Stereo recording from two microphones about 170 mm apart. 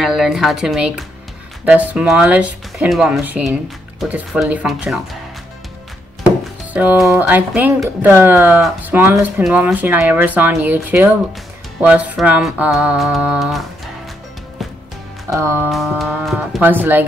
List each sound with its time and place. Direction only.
0.0 s speech: centre (ahead or behind)
6.7 s speech: 10° right (ahead or behind)
15.2 s speech: 15° right (ahead or behind)
15.7 s speech: centre (ahead or behind)